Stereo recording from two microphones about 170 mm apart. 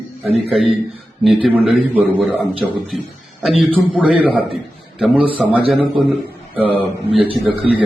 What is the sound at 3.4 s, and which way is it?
A man's voice, centre (ahead or behind).